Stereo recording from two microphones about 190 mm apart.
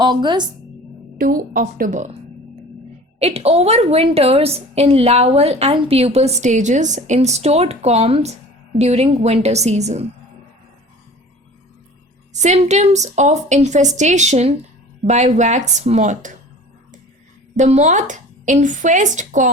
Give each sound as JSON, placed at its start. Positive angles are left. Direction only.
{"t": 0.0, "sound": "a woman's voice", "side_deg": -25}
{"t": 1.2, "sound": "a woman's voice", "side_deg": -45}
{"t": 3.2, "sound": "a woman's voice", "side_deg": -30}
{"t": 12.3, "sound": "a woman's voice", "side_deg": -40}
{"t": 17.6, "sound": "a woman's voice", "side_deg": -40}